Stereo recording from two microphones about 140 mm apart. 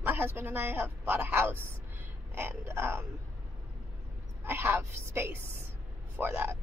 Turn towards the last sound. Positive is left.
turn(degrees=-15)  # may be behind; listen again after turning